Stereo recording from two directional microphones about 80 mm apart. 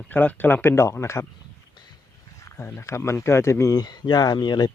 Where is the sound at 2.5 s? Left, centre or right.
Left.